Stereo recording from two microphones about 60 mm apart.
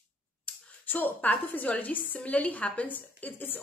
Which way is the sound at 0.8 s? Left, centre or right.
Left.